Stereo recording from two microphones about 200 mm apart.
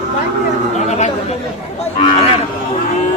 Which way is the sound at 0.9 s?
35° left (ahead or behind).